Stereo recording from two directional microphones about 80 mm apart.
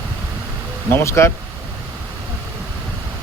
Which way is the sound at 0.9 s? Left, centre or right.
Left.